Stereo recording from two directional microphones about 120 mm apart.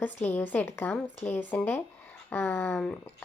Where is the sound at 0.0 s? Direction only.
15° left (ahead or behind).